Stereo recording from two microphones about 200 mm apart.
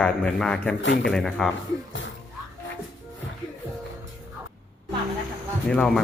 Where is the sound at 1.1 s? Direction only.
Centre (ahead or behind).